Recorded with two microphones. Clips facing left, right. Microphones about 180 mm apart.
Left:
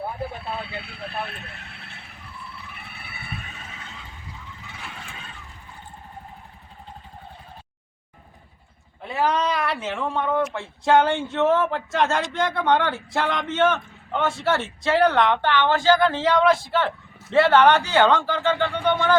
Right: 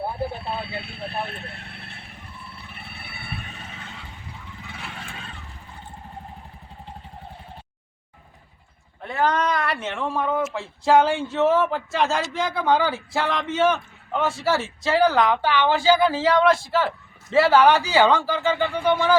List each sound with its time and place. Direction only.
0.0 s speech: 30° right (ahead or behind)
9.0 s speech: 5° left (ahead or behind)